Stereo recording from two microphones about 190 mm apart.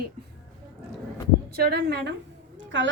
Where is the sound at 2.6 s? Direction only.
75° right (ahead or behind).